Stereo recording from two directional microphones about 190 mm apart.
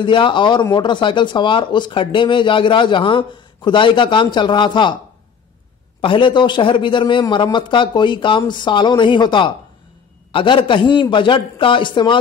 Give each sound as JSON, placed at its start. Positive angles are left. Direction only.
{"t": 0.0, "sound": "speech", "side_deg": 25}
{"t": 5.9, "sound": "speech", "side_deg": 25}